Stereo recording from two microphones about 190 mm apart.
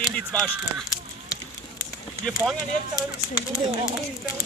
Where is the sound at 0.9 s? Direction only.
20° left (ahead or behind).